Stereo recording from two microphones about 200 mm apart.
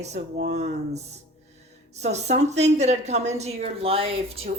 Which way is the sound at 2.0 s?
35° right (ahead or behind).